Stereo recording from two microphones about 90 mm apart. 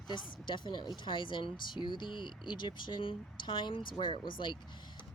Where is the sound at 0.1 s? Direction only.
60° left (ahead or behind).